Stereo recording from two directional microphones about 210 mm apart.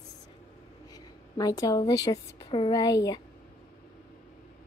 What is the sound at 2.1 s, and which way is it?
A woman's voice, 20° left (ahead or behind).